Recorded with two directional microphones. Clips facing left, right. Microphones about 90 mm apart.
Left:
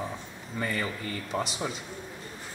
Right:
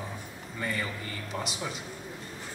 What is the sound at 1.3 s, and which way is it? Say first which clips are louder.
Speech: left 5 dB; 35° left (ahead or behind).